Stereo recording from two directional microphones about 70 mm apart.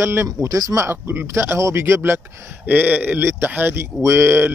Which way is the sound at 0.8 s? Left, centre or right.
Right.